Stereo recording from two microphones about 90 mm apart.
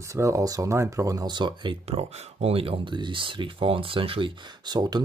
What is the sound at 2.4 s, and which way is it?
Speech, 90° right.